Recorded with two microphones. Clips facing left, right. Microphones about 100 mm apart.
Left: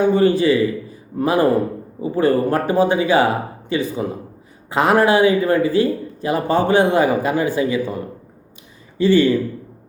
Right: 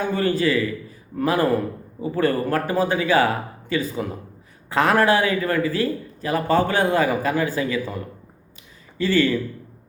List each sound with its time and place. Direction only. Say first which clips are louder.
0.0 s speech: left 6 dB; 20° left (ahead or behind)